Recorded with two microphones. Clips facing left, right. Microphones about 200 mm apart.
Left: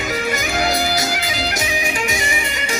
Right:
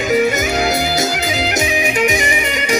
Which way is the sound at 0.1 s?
25° right (ahead or behind).